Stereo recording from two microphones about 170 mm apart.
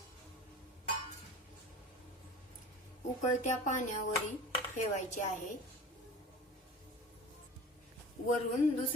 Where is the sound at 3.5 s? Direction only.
45° left (ahead or behind).